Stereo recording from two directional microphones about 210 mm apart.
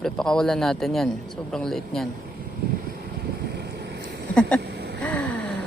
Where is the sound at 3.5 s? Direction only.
55° right (ahead or behind).